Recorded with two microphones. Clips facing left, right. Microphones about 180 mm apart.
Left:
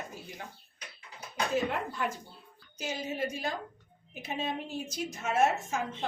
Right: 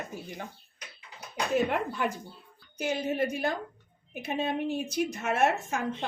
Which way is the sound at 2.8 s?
60° right (ahead or behind).